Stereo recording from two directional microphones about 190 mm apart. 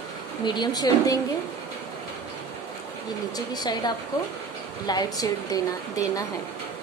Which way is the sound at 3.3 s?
20° left (ahead or behind).